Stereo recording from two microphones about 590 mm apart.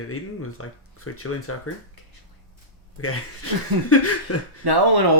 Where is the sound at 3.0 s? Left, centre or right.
Left.